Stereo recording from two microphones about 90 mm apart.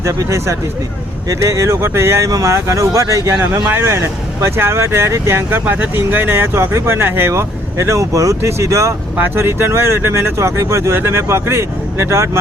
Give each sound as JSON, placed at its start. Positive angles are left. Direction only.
{"t": 0.0, "sound": "speech", "side_deg": -35}